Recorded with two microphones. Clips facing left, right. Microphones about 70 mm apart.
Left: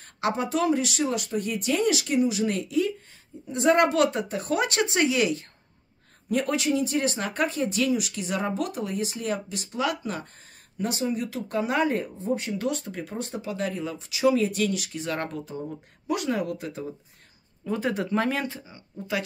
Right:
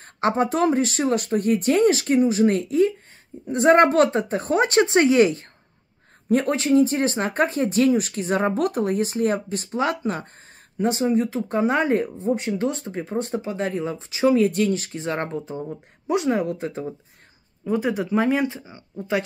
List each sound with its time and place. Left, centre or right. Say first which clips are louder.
0.0 s speech: right 6 dB; right
17.6 s speech: right 4 dB; centre
18.2 s speech: right 6 dB; centre